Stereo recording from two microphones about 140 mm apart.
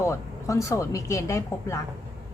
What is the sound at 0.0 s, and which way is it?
A woman's voice, 20° left (ahead or behind).